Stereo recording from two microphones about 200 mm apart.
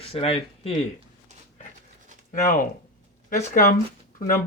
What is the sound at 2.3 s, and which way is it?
Speech, 40° left (ahead or behind).